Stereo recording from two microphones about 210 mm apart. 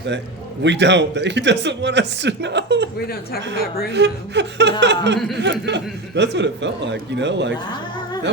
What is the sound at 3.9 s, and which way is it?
A man's voice, 55° right (ahead or behind).